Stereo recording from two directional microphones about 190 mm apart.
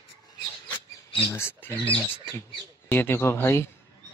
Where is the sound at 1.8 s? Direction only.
25° left (ahead or behind).